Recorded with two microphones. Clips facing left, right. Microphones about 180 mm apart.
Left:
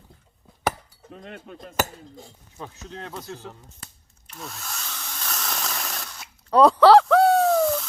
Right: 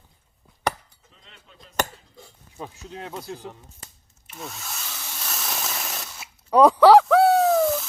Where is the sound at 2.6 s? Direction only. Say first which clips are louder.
Right 1 dB; 10° right (ahead or behind).